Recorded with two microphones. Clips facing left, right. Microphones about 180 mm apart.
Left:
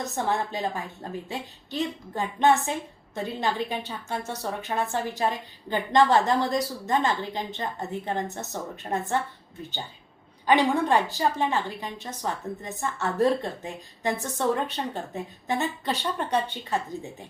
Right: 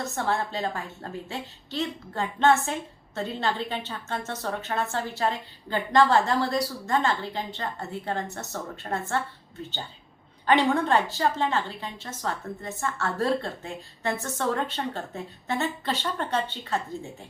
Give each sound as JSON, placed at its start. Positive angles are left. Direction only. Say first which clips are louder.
{"t": 0.0, "sound": "a woman's voice", "louder": "even", "side_deg": 15}
{"t": 10.4, "sound": "a woman's voice", "louder": "even", "side_deg": 15}